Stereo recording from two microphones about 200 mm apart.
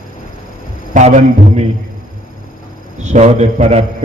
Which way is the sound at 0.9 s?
35° right (ahead or behind).